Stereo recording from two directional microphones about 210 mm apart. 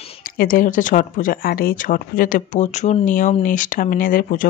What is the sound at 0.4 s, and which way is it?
Speech, 40° left (ahead or behind).